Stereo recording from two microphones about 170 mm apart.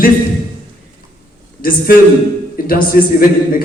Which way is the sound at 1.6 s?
55° left (ahead or behind).